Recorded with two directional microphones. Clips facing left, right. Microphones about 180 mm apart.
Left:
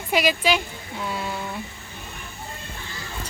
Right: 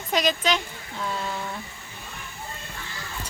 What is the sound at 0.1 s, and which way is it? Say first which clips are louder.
Speech: left 2 dB; 5° left (ahead or behind).